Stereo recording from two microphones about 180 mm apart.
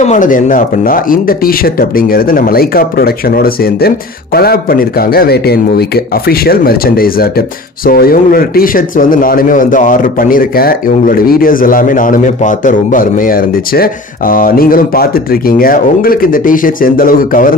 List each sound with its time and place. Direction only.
0.0 s speech: 45° left (ahead or behind)